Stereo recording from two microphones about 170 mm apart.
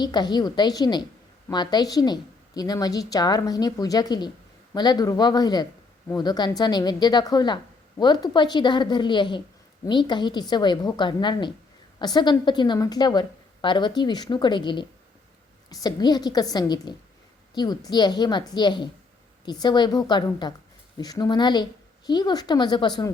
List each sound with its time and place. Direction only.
0.0 s speech: 25° left (ahead or behind)